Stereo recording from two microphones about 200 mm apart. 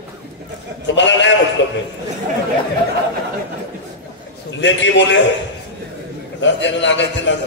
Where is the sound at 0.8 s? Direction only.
65° left (ahead or behind).